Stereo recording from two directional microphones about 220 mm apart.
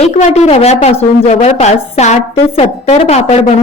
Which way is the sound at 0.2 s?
30° left (ahead or behind).